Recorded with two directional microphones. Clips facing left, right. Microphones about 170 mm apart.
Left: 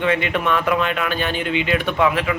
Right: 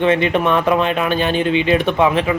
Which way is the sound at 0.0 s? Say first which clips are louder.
Right 5 dB; 25° right (ahead or behind).